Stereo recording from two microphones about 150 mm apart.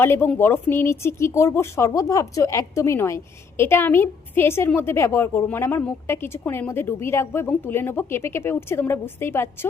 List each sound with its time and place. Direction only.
0.0 s a woman's voice: 15° left (ahead or behind)